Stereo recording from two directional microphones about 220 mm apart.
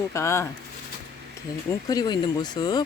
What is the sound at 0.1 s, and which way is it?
Speech, 15° left (ahead or behind).